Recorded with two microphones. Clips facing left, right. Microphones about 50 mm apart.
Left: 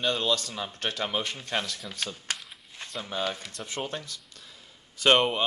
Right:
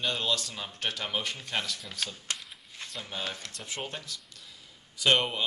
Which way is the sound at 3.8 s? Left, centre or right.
Left.